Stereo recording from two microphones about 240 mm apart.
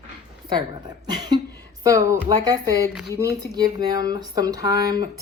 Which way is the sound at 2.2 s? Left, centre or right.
Centre.